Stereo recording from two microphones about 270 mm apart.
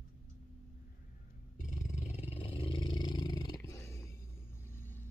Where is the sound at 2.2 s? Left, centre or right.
Left.